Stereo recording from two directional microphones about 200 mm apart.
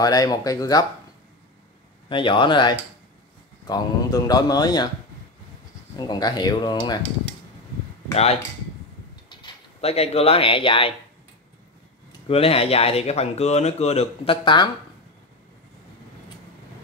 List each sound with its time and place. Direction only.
0.0 s speech: 20° left (ahead or behind)
2.0 s speech: 25° left (ahead or behind)
5.9 s speech: 20° left (ahead or behind)
8.1 s speech: 30° left (ahead or behind)
12.3 s speech: 30° left (ahead or behind)